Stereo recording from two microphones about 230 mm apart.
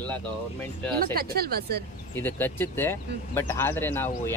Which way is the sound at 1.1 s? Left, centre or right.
Right.